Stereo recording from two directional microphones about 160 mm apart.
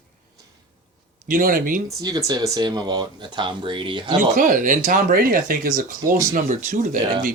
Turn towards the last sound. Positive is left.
turn(degrees=-55)  # may be behind; listen again after turning